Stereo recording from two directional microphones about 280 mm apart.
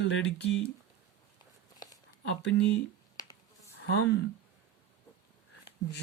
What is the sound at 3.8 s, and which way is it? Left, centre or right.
Speech, left.